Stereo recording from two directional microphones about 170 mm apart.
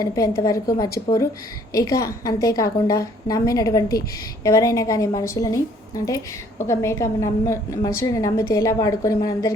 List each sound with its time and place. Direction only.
0.0 s a woman's voice: 20° left (ahead or behind)